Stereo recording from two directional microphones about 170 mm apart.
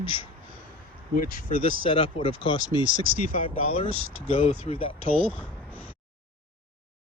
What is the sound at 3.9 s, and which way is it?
Speech, 30° right (ahead or behind).